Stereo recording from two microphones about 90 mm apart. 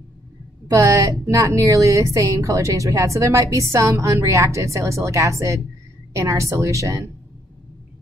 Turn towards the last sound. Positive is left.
turn(degrees=-35)  # may be behind; listen again after turning